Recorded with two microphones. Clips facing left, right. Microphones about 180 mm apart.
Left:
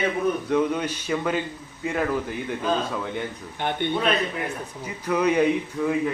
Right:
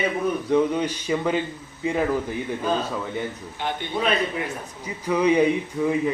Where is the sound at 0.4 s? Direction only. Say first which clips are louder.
Right 2 dB; 10° right (ahead or behind).